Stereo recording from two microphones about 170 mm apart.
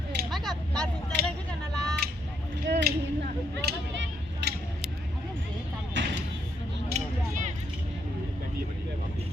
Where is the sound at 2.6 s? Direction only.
90° right.